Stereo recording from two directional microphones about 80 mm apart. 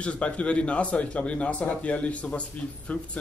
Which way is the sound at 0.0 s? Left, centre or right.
Centre.